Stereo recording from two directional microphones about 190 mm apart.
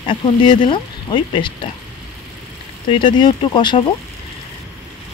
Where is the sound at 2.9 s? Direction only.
25° left (ahead or behind).